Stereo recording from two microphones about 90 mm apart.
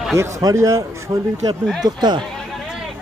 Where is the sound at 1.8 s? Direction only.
50° right (ahead or behind).